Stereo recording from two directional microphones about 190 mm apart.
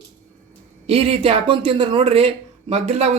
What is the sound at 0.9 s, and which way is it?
Speech, 30° right (ahead or behind).